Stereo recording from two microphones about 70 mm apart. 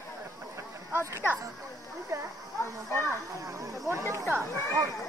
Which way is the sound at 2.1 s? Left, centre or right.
Right.